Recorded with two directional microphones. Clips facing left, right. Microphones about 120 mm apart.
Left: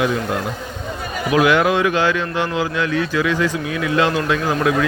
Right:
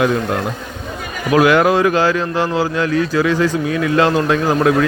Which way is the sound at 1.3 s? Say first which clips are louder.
Right 3 dB; 45° right (ahead or behind).